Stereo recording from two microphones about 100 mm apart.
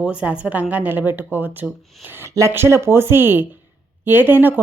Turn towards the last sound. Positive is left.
turn(degrees=-20)  # may be behind; listen again after turning